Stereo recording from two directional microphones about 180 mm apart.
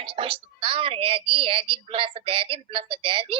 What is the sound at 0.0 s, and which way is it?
A woman's voice, 30° right (ahead or behind).